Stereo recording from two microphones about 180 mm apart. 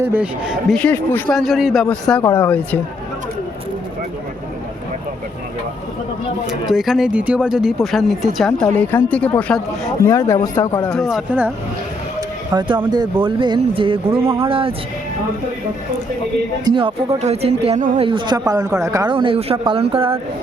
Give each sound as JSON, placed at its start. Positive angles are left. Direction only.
{"t": 0.0, "sound": "speech", "side_deg": -10}
{"t": 0.8, "sound": "a man's voice", "side_deg": 10}
{"t": 6.7, "sound": "a man's voice", "side_deg": 0}
{"t": 10.0, "sound": "speech", "side_deg": 15}
{"t": 10.9, "sound": "a man's voice", "side_deg": 0}
{"t": 12.5, "sound": "speech", "side_deg": -25}
{"t": 14.2, "sound": "speech", "side_deg": -15}
{"t": 14.4, "sound": "speech", "side_deg": -30}
{"t": 16.6, "sound": "speech", "side_deg": -25}
{"t": 18.0, "sound": "speech", "side_deg": -25}
{"t": 19.1, "sound": "speech", "side_deg": -30}